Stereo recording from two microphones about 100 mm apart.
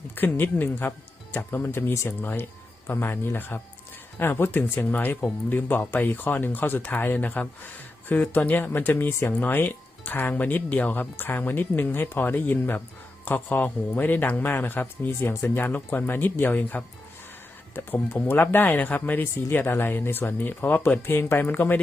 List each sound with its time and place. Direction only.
0.2 s a man's voice: 20° left (ahead or behind)